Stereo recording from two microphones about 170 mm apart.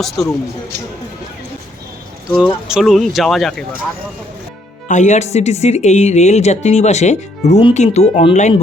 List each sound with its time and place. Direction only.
2.3 s speech: 5° right (ahead or behind)
4.9 s speech: 45° left (ahead or behind)